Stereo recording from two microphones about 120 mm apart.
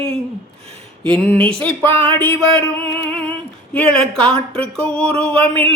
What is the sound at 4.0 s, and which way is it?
Music, 10° left (ahead or behind).